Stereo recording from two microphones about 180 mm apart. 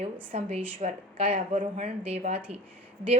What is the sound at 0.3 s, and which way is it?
A woman's voice, 35° right (ahead or behind).